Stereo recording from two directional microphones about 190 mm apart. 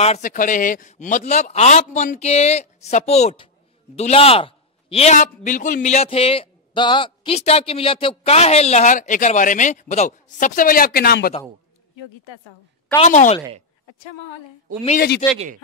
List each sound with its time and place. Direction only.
0.0 s a man's voice: 40° left (ahead or behind)
13.0 s a man's voice: 40° left (ahead or behind)
15.3 s speech: 40° right (ahead or behind)